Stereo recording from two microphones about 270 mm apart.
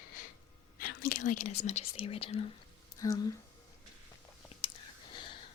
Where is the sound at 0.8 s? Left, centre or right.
Left; by 3.3 s centre.